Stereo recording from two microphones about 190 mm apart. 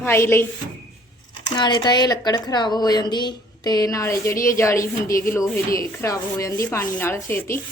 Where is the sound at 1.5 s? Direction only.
25° left (ahead or behind).